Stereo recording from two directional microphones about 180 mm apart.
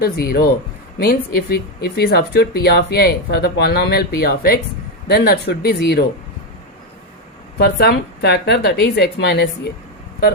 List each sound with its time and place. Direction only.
0.0 s speech: 60° left (ahead or behind)
7.6 s speech: 65° left (ahead or behind)